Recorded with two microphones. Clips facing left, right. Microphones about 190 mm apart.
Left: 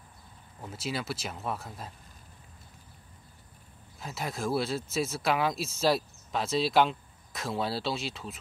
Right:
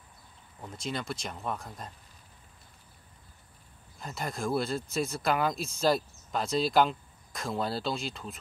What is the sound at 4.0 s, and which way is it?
Speech, 5° left (ahead or behind).